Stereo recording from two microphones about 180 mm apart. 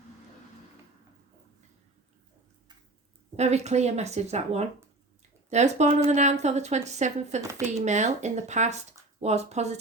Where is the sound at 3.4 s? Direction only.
40° right (ahead or behind).